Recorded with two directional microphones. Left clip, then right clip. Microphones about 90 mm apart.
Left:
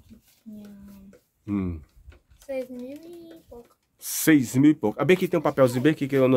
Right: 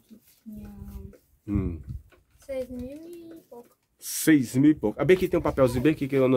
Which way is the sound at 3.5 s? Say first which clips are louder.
Left 2 dB; 40° left (ahead or behind).